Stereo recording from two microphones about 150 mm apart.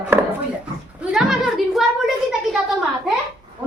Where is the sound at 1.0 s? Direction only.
5° right (ahead or behind).